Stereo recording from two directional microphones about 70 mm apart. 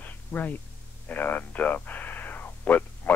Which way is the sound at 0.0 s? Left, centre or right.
Left.